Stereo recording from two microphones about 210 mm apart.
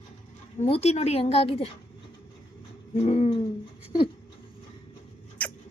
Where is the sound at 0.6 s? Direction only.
30° left (ahead or behind).